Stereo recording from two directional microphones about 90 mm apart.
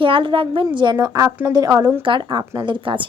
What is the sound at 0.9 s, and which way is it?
Speech, 40° right (ahead or behind).